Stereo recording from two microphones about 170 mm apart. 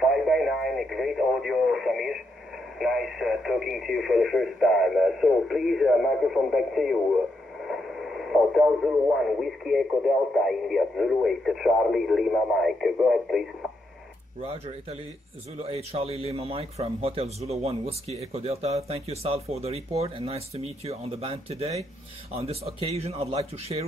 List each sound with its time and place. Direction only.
0.0 s radio: centre (ahead or behind)
2.8 s speech: centre (ahead or behind)
14.4 s speech: 35° right (ahead or behind)